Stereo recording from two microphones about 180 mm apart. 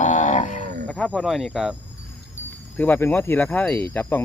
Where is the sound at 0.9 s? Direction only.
5° left (ahead or behind).